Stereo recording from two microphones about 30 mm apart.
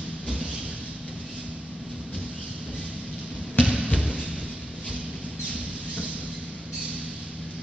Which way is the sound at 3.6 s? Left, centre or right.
Right.